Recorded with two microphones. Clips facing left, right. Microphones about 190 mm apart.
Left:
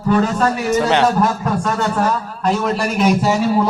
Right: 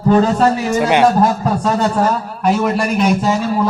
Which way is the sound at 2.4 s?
5° right (ahead or behind).